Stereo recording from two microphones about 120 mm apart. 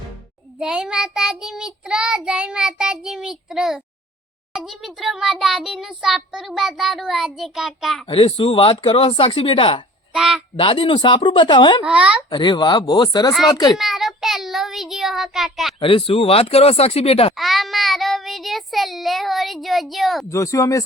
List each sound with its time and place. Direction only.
0.6 s child singing: 5° right (ahead or behind)
8.0 s speech: 50° left (ahead or behind)
10.1 s speech: 5° right (ahead or behind)
10.6 s speech: 45° left (ahead or behind)
11.8 s child singing: 10° right (ahead or behind)
12.3 s speech: 40° left (ahead or behind)
13.7 s child singing: centre (ahead or behind)
15.8 s speech: 45° left (ahead or behind)
17.3 s child singing: centre (ahead or behind)
20.3 s speech: 25° left (ahead or behind)